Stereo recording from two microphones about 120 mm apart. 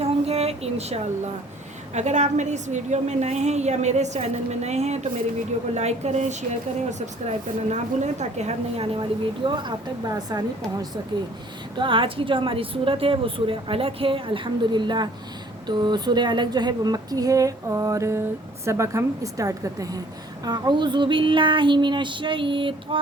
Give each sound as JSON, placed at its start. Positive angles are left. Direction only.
{"t": 0.0, "sound": "a sound", "side_deg": -55}
{"t": 1.9, "sound": "a woman's voice", "side_deg": -80}
{"t": 9.0, "sound": "speech", "side_deg": -40}
{"t": 11.8, "sound": "a woman's voice", "side_deg": -45}